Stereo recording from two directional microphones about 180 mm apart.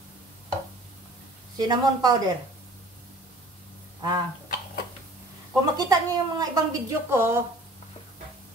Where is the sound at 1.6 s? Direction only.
25° right (ahead or behind).